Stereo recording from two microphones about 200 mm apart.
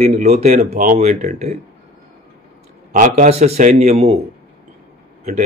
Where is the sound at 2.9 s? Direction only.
40° right (ahead or behind).